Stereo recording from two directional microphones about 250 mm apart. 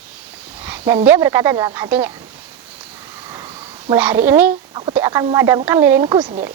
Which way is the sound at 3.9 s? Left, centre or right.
Centre.